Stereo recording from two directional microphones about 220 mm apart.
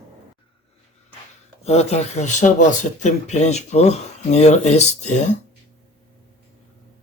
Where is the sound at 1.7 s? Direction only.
30° left (ahead or behind).